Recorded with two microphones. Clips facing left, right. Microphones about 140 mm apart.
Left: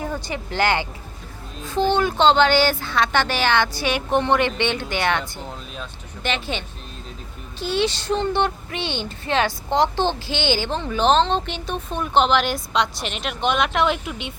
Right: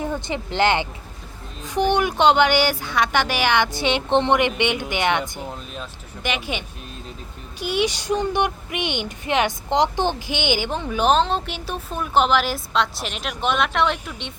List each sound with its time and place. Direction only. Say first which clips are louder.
0.0 s speech: right 2 dB; 20° right (ahead or behind); by 14.3 s 5° left (ahead or behind)